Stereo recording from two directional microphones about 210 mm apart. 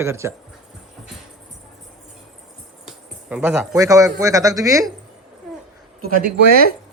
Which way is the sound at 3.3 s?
10° right (ahead or behind).